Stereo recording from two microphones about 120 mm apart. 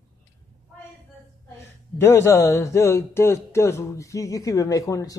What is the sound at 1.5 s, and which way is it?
Speech, 20° left (ahead or behind).